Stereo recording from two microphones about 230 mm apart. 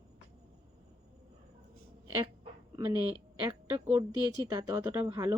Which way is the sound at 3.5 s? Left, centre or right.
Centre.